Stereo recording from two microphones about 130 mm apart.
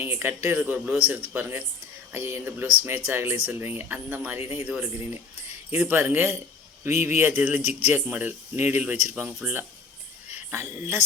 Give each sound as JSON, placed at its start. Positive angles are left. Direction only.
{"t": 0.0, "sound": "a man's voice", "side_deg": -15}
{"t": 5.7, "sound": "a man's voice", "side_deg": -15}